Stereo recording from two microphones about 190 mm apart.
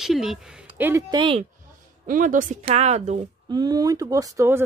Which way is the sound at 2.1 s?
45° right (ahead or behind).